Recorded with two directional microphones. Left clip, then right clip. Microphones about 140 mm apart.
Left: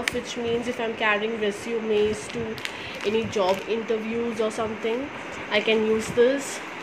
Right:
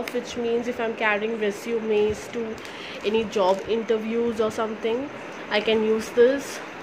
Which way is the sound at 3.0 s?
10° right (ahead or behind).